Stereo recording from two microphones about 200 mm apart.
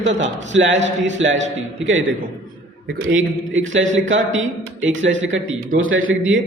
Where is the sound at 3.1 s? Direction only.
70° right (ahead or behind).